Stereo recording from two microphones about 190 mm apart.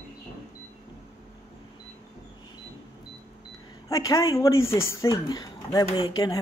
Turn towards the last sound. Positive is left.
turn(degrees=20)  # may be behind; listen again after turning